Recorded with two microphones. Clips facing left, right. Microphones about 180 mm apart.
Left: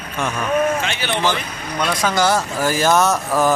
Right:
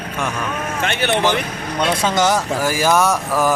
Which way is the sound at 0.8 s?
55° right (ahead or behind).